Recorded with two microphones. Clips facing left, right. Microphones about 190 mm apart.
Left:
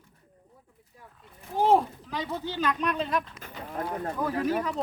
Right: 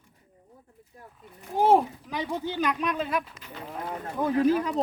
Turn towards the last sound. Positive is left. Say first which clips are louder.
# right 5 dB
turn(degrees=-25)  # may be behind; listen again after turning